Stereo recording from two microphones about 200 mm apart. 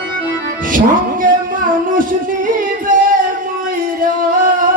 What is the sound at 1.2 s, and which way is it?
Music, 40° right (ahead or behind).